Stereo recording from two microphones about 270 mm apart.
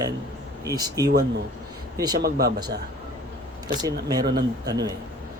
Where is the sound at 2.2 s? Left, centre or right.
Right.